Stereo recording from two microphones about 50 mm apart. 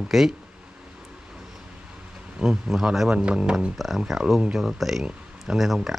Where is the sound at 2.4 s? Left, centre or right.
Centre.